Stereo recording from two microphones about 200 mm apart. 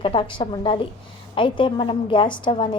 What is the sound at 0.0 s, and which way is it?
A woman's voice, 25° left (ahead or behind).